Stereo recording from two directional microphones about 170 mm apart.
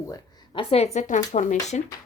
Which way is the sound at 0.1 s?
25° left (ahead or behind).